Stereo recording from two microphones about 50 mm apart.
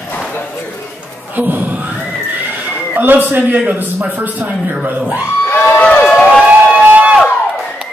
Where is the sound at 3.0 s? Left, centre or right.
Right.